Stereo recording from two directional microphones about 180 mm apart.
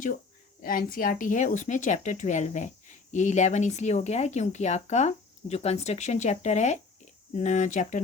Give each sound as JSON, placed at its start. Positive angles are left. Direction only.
{"t": 0.6, "sound": "a woman's voice", "side_deg": 55}